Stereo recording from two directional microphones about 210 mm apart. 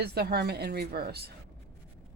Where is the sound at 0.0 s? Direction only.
50° right (ahead or behind).